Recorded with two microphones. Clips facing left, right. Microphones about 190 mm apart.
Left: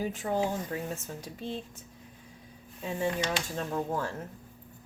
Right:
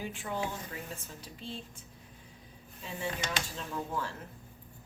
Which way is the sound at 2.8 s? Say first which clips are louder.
Left 7 dB; 45° left (ahead or behind).